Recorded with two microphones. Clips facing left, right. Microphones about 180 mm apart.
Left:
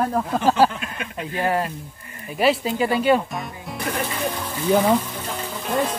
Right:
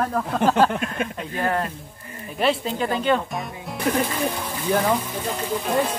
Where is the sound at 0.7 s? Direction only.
45° right (ahead or behind).